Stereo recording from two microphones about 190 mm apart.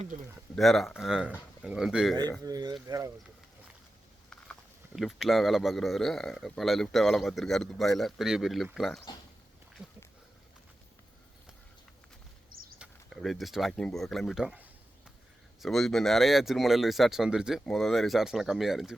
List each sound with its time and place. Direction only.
0.5 s speech: centre (ahead or behind)
2.4 s speech: 20° right (ahead or behind)
4.9 s speech: centre (ahead or behind)
12.8 s speech: centre (ahead or behind)